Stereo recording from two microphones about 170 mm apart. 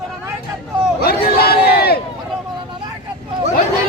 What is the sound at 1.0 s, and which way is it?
Crowd, 65° left (ahead or behind).